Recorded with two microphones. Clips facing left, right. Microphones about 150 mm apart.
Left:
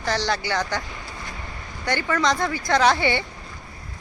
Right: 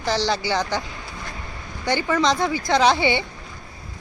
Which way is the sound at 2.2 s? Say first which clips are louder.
Right 2 dB; 25° right (ahead or behind).